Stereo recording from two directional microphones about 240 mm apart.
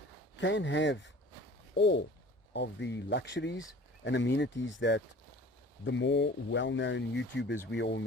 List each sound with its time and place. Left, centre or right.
0.3 s speech: left